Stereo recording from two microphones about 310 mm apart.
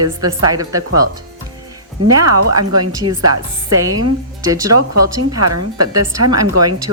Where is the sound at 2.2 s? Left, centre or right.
Right.